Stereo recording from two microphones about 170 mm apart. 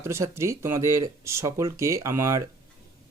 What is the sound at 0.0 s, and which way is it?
Speech, 15° right (ahead or behind).